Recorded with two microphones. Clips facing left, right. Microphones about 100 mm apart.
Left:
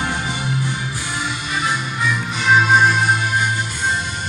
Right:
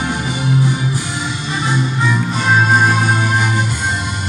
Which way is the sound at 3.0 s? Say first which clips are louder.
Right 2 dB; 75° right (ahead or behind).